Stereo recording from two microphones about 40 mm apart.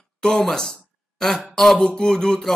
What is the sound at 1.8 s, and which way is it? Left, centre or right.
Speech, centre.